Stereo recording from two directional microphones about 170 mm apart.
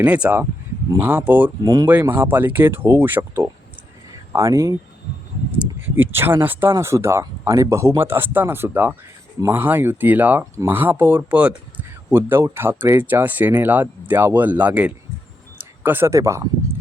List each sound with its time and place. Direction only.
0.0 s speech: 10° right (ahead or behind)